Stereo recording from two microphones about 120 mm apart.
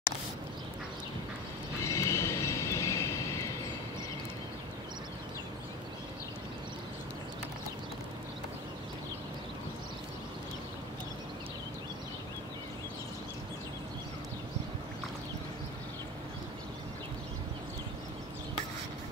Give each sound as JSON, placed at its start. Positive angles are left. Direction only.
{"t": 1.9, "sound": "vehicle", "side_deg": 25}